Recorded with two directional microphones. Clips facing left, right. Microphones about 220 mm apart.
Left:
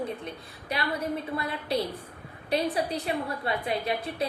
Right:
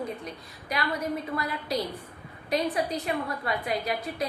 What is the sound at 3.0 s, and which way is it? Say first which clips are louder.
A woman's voice: even; 30° left (ahead or behind).